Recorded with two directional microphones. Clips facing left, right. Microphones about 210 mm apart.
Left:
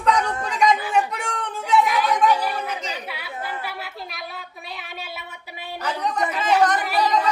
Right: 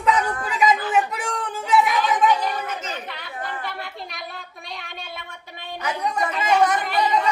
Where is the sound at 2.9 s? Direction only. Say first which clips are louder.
Even; 10° left (ahead or behind).